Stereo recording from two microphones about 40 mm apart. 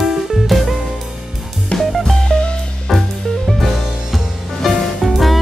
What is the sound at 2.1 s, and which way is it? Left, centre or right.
Music, left.